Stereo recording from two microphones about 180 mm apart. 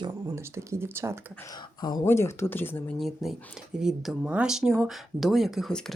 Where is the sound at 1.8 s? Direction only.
20° left (ahead or behind).